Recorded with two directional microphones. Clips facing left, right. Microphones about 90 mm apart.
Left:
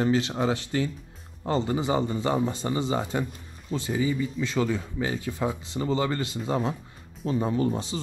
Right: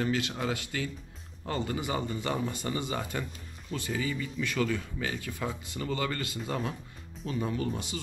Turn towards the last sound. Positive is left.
turn(degrees=30)  # may be behind; listen again after turning